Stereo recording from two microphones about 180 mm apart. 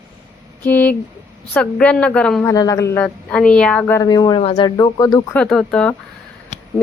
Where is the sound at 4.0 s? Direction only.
20° left (ahead or behind).